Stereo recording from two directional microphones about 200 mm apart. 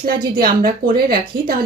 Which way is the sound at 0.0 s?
45° right (ahead or behind).